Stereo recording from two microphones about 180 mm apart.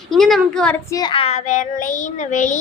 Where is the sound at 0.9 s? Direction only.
20° left (ahead or behind); by 2.6 s 45° left (ahead or behind).